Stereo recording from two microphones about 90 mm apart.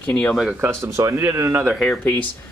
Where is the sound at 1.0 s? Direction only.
35° right (ahead or behind).